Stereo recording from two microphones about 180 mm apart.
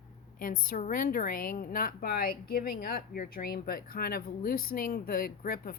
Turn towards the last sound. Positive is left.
turn(degrees=55)  # may be behind; listen again after turning